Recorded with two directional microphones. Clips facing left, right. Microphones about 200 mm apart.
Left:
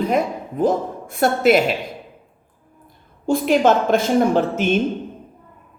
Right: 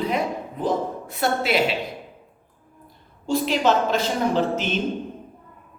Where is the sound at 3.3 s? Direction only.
50° left (ahead or behind).